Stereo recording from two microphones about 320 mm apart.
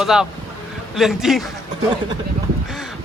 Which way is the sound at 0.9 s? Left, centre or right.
Centre.